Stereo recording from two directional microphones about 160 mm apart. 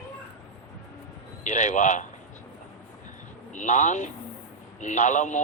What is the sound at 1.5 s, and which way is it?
Speech, 50° left (ahead or behind).